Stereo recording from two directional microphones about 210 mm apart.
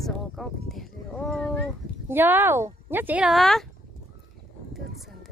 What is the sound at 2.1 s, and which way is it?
Speech, 10° right (ahead or behind).